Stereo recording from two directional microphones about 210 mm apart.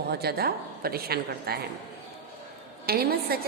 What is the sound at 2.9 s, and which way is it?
Speech, 45° right (ahead or behind).